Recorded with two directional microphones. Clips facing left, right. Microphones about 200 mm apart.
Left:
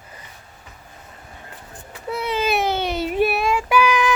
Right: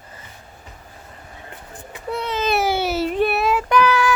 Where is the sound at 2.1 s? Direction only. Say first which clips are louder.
Left 1 dB; 5° left (ahead or behind).